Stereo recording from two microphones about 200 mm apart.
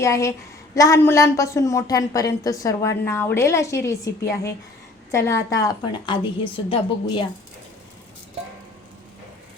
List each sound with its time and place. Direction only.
0.0 s a woman's voice: 15° left (ahead or behind)